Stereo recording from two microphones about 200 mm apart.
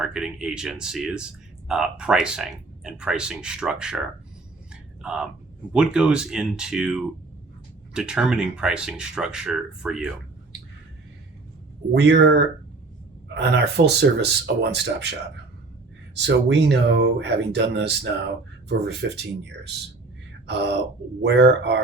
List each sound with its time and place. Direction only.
0.0 s speech: 5° right (ahead or behind)
4.7 s a sound: 5° right (ahead or behind)
5.7 s speech: 5° right (ahead or behind)
11.9 s speech: 60° right (ahead or behind)
16.1 s speech: 60° right (ahead or behind)
20.5 s speech: 60° right (ahead or behind)